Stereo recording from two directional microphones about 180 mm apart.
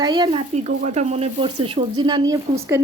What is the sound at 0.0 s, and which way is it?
Speech, 25° right (ahead or behind).